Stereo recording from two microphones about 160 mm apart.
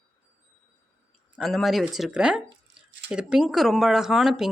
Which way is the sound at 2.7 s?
90° right.